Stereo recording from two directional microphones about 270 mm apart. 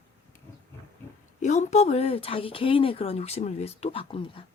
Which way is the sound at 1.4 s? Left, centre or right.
Left.